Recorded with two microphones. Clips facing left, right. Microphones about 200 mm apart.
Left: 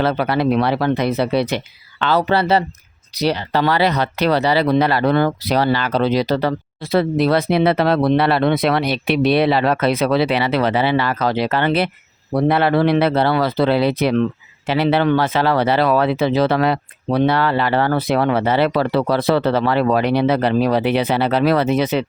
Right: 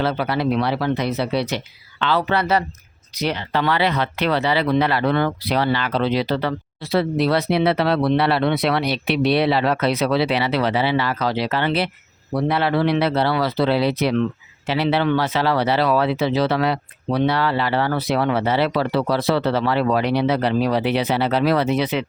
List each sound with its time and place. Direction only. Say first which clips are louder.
0.0 s speech: left 3 dB; 55° left (ahead or behind)